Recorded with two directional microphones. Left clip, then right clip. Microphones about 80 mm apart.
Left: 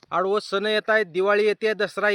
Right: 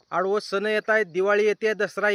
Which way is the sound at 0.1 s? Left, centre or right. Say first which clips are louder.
Left 1 dB; centre.